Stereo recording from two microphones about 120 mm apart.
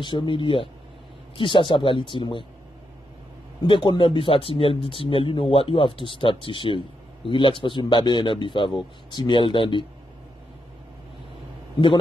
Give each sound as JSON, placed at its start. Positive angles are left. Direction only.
{"t": 0.0, "sound": "speech", "side_deg": 40}
{"t": 3.6, "sound": "speech", "side_deg": 40}